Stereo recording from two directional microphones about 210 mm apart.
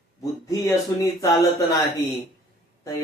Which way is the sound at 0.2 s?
15° left (ahead or behind).